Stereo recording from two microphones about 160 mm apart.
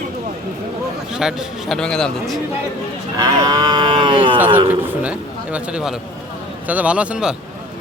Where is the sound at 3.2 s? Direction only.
25° right (ahead or behind).